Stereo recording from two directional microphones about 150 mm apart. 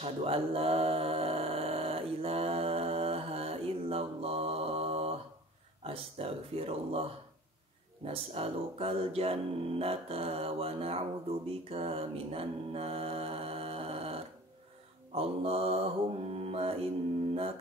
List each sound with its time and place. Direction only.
0.0 s mantra: 40° right (ahead or behind)
5.9 s speech: 40° right (ahead or behind)
15.1 s mantra: 40° right (ahead or behind)